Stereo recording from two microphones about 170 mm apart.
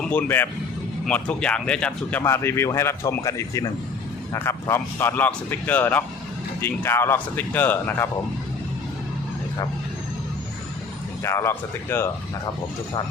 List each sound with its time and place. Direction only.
0.0 s speech: 10° left (ahead or behind)
11.2 s speech: 15° left (ahead or behind)